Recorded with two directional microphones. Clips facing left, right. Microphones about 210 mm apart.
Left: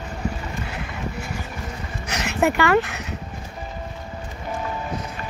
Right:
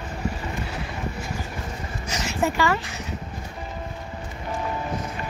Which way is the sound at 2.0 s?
65° left (ahead or behind).